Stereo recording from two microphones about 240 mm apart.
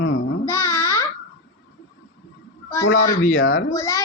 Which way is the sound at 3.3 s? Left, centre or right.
Left.